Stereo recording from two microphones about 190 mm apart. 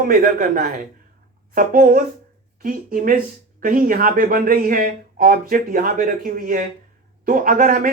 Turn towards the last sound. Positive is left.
turn(degrees=-45)  # may be behind; listen again after turning